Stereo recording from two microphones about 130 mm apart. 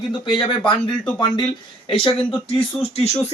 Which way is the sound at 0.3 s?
40° left (ahead or behind).